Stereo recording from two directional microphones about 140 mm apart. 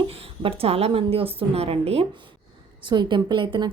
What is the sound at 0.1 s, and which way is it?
A woman's voice, 45° right (ahead or behind).